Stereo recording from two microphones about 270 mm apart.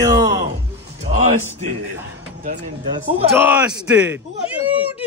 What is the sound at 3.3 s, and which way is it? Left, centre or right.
Speech, centre.